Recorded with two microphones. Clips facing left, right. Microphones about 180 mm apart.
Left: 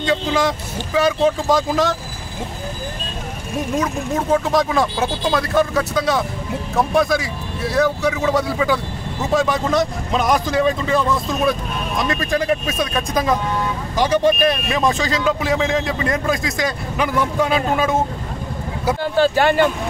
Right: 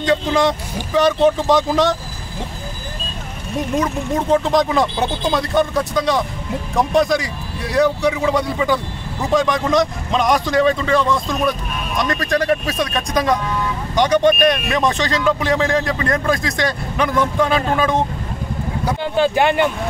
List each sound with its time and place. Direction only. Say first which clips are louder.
0.0 s a man's voice: right 2 dB; centre (ahead or behind)
4.5 s a man's voice: right 1 dB; 5° left (ahead or behind)
19.1 s speech: even; 20° right (ahead or behind)